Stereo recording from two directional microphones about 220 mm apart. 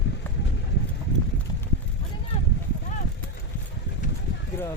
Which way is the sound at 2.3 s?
30° left (ahead or behind).